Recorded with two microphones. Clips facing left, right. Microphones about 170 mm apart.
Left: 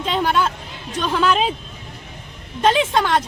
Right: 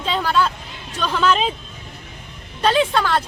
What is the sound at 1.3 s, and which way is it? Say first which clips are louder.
Speech: right 1 dB; 5° left (ahead or behind).